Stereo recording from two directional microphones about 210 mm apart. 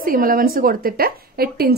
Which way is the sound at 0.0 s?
40° right (ahead or behind).